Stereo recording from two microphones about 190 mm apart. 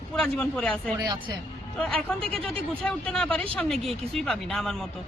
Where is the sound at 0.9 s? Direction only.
20° right (ahead or behind).